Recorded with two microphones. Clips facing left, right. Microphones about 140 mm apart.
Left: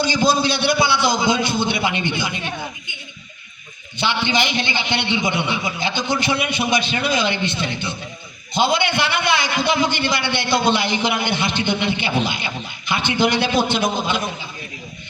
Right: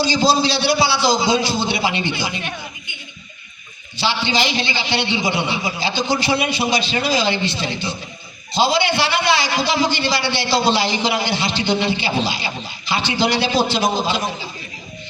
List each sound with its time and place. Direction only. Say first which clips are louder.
0.0 s a man's voice: right 1 dB; 50° left (ahead or behind)
3.9 s a man's voice: even; 55° left (ahead or behind)